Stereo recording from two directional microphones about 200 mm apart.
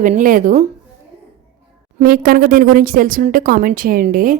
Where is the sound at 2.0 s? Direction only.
45° right (ahead or behind).